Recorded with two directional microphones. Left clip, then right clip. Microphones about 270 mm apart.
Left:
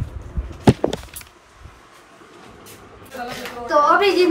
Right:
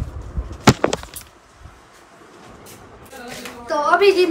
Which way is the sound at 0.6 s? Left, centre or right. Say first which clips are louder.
Right 2 dB; left.